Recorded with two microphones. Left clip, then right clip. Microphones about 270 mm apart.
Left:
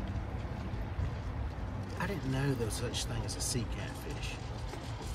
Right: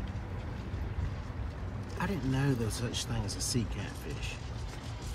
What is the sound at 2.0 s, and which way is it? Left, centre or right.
Speech, right.